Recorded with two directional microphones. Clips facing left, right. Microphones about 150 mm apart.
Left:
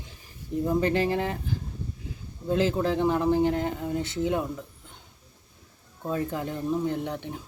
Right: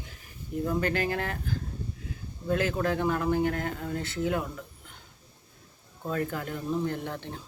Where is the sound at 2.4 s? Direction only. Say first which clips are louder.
Left 3 dB; 25° left (ahead or behind).